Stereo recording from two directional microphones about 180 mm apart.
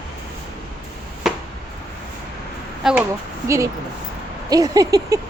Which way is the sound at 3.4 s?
15° right (ahead or behind).